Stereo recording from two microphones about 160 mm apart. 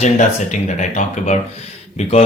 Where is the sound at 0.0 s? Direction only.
50° left (ahead or behind).